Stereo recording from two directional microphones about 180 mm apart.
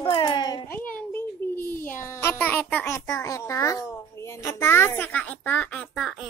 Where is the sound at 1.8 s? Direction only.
15° left (ahead or behind).